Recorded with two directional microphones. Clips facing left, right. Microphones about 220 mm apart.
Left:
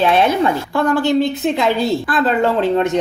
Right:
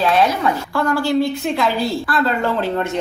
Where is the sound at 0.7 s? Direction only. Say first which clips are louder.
Left 1 dB; 20° left (ahead or behind).